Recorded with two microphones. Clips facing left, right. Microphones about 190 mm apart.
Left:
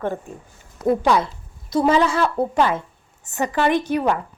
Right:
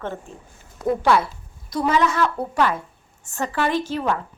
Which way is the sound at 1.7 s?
30° left (ahead or behind).